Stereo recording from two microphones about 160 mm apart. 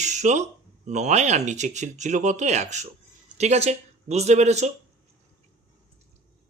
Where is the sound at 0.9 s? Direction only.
45° right (ahead or behind).